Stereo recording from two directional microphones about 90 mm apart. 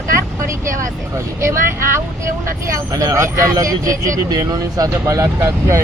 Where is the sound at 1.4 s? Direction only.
30° right (ahead or behind).